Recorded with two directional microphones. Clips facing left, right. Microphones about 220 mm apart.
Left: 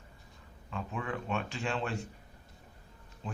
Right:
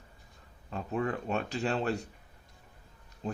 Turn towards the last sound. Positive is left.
turn(degrees=-40)  # may be behind; listen again after turning